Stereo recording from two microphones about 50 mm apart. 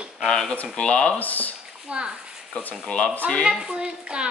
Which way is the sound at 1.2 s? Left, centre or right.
Left.